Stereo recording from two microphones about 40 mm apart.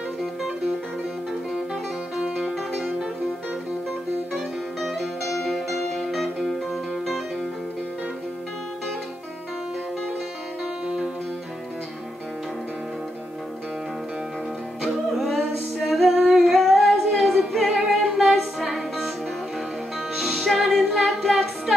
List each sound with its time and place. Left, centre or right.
2.1 s music: centre
4.8 s music: centre
14.8 s music: centre
20.2 s music: centre